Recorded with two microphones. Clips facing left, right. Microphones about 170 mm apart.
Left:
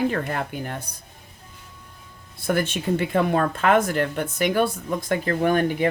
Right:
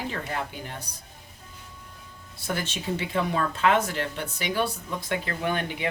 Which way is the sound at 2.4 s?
55° left (ahead or behind).